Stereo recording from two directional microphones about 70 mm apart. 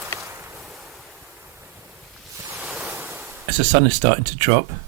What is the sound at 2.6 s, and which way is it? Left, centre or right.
Waves, centre.